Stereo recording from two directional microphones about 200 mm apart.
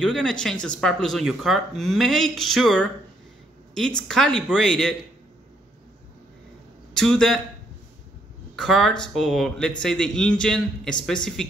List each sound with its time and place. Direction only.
0.0 s speech: 5° left (ahead or behind)
6.9 s a man's voice: 5° left (ahead or behind)
8.5 s speech: centre (ahead or behind)